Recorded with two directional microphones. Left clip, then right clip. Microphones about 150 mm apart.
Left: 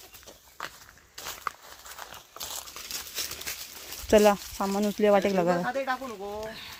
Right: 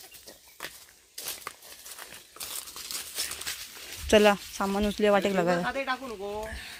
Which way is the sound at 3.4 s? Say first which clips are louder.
Right 1 dB; 70° left (ahead or behind).